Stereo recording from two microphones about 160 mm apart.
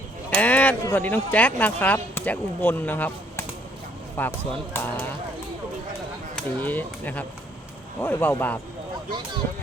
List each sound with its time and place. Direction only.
0.3 s speech: 10° left (ahead or behind)
6.3 s speech: 10° left (ahead or behind)
9.0 s speech: 30° right (ahead or behind)